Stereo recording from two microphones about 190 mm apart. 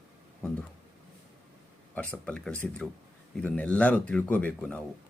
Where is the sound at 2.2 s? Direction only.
5° left (ahead or behind).